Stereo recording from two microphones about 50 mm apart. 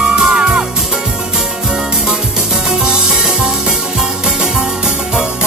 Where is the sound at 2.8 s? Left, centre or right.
Centre.